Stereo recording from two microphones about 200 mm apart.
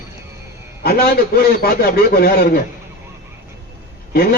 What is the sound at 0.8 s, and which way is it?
A man's voice, 50° left (ahead or behind).